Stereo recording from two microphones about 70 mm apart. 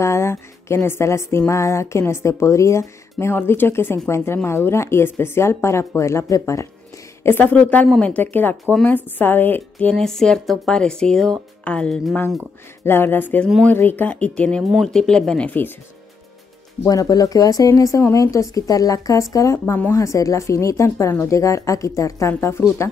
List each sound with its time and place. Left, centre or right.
0.0 s speech: left
7.2 s a woman's voice: left
9.8 s speech: centre
12.8 s a woman's voice: left
14.1 s speech: centre
14.6 s speech: centre
14.9 s speech: centre
16.8 s speech: left